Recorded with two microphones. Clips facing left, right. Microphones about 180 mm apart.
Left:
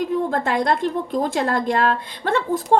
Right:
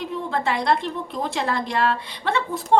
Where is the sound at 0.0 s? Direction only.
45° left (ahead or behind).